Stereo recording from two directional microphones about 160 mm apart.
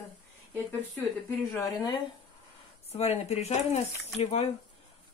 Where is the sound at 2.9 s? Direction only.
40° left (ahead or behind).